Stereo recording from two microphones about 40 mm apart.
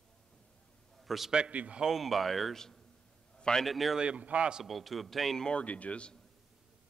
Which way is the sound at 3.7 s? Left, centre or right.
Centre.